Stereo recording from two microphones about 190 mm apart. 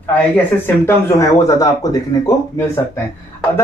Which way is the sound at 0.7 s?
15° left (ahead or behind).